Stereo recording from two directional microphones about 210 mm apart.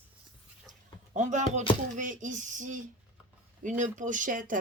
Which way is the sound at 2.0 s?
35° right (ahead or behind).